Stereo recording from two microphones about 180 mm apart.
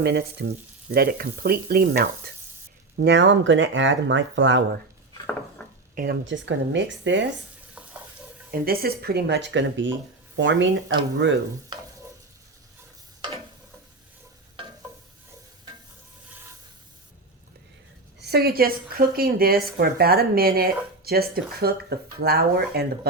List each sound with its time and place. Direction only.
0.0 s speech: 65° right (ahead or behind)
3.0 s speech: 80° right
5.9 s speech: 50° right (ahead or behind)
6.2 s speech: 90° right
7.8 s frying: 5° right (ahead or behind)
8.4 s speech: 55° right (ahead or behind); by 11.3 s 90° right
11.7 s stir: 25° right (ahead or behind)
14.6 s stir: 30° right (ahead or behind)
18.2 s speech: 60° right (ahead or behind)